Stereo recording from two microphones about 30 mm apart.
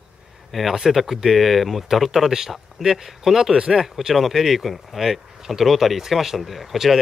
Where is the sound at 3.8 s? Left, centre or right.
Centre.